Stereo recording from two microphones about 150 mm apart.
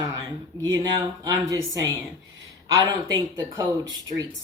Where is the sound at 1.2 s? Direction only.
20° right (ahead or behind).